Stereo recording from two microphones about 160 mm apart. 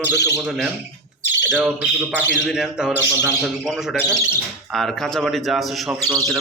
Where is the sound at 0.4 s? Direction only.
Centre (ahead or behind).